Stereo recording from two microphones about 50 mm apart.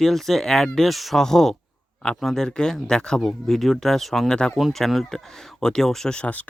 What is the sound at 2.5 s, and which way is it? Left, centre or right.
Speech, centre.